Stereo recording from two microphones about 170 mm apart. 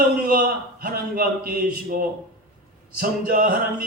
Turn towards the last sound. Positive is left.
turn(degrees=-55)  # may be behind; listen again after turning